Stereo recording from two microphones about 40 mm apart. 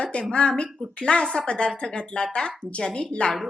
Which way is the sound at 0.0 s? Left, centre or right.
Left.